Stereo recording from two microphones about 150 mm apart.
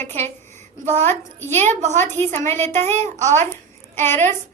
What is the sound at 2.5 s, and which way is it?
Speech, 15° left (ahead or behind).